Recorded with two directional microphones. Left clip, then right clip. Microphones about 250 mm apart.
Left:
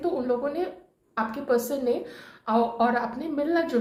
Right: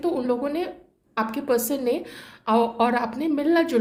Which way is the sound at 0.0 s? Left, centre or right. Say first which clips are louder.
Right 2 dB; right.